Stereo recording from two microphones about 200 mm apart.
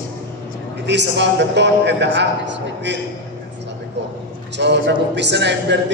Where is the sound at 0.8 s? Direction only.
60° right (ahead or behind).